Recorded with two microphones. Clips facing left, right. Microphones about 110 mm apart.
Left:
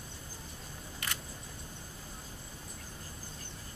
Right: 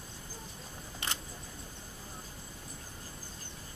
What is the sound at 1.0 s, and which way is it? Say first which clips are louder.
Camera: right 2 dB; 25° right (ahead or behind).